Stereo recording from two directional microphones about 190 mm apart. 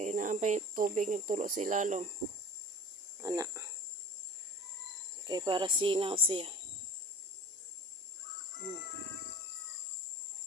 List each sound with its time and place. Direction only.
0.0 s speech: 40° right (ahead or behind)
3.2 s speech: 15° right (ahead or behind)
5.2 s speech: 25° right (ahead or behind)